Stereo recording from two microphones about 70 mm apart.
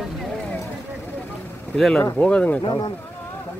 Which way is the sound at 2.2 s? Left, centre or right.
Centre.